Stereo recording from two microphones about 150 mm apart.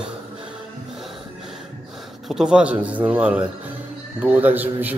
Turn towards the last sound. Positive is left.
turn(degrees=-10)  # may be behind; listen again after turning